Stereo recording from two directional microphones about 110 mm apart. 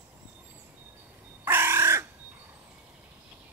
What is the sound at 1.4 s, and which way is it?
Crow, 20° right (ahead or behind).